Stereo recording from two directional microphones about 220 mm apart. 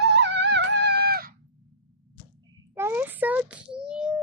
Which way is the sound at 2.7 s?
10° right (ahead or behind).